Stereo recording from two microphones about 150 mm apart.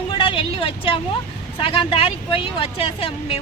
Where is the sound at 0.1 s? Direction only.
35° left (ahead or behind).